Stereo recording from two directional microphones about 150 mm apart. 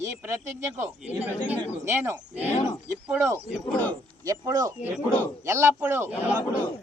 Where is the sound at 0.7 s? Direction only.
15° right (ahead or behind).